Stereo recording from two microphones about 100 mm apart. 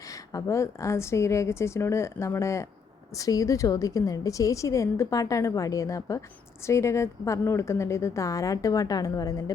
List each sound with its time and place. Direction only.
0.3 s a woman's voice: 30° left (ahead or behind)